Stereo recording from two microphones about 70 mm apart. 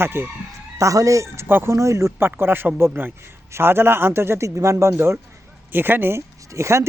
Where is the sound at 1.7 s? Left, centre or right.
Right.